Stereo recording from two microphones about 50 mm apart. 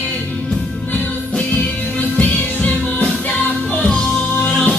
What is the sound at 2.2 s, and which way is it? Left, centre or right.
Music, left.